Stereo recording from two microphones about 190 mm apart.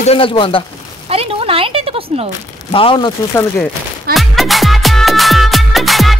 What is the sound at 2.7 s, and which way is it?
Speech, 30° left (ahead or behind).